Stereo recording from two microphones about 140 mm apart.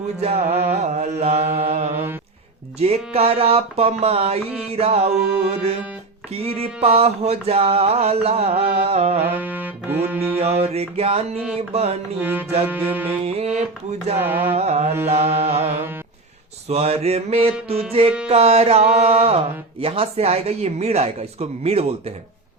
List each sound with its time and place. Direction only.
0.2 s music: 45° right (ahead or behind)
6.4 s music: 45° right (ahead or behind)
9.2 s music: 10° right (ahead or behind)
10.4 s music: 50° right (ahead or behind)
12.2 s music: 10° right (ahead or behind)
13.2 s music: 50° right (ahead or behind)
14.2 s music: 15° right (ahead or behind)
14.5 s music: 50° right (ahead or behind)